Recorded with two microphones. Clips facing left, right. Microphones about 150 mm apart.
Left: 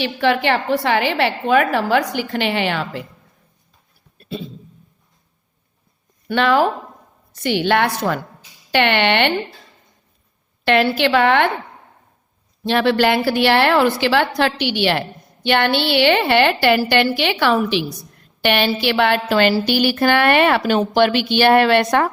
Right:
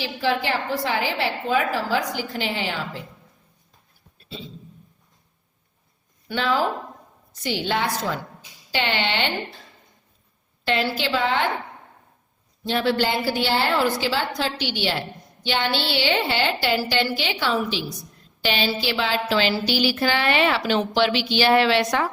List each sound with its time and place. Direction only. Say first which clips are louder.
0.0 s a woman's voice: left 6 dB; 70° left (ahead or behind)
4.2 s a sound: left 9 dB; 55° left (ahead or behind)
6.2 s a woman's voice: left 7 dB; 65° left (ahead or behind)
10.7 s a woman's voice: left 8 dB; 65° left (ahead or behind)
12.6 s a woman's voice: left 6 dB; 75° left (ahead or behind); by 22.1 s 55° left (ahead or behind)